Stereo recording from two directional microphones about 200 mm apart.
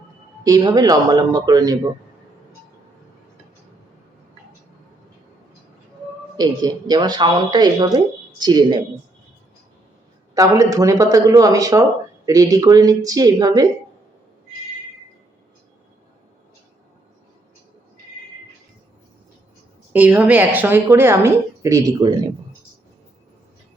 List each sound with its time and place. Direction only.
0.4 s speech: 20° right (ahead or behind)
6.3 s speech: 20° right (ahead or behind)
10.3 s speech: 15° right (ahead or behind)
19.9 s speech: 10° right (ahead or behind)